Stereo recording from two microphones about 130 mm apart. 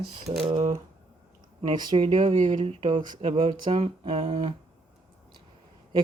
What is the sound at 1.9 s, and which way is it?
Speech, 45° right (ahead or behind).